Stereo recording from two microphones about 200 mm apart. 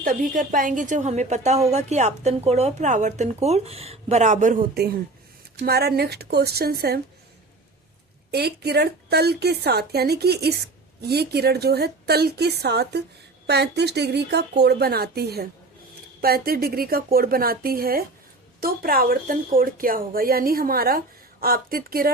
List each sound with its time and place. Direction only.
0.0 s a woman's voice: 45° right (ahead or behind)
8.3 s speech: 55° right (ahead or behind)